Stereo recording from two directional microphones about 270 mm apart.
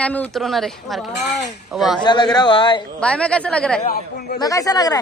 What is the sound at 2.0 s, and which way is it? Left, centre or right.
Speech, centre.